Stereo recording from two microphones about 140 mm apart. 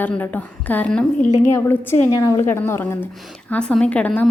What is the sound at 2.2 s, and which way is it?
A woman's voice, 25° left (ahead or behind).